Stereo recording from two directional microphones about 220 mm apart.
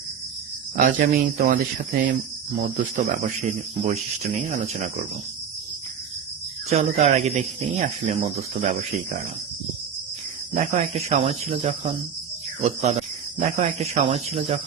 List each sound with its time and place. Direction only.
0.8 s speech: 40° right (ahead or behind)
2.6 s speech: 35° right (ahead or behind)
4.4 s speech: 35° right (ahead or behind)
6.7 s speech: 30° right (ahead or behind)
10.5 s speech: 35° right (ahead or behind)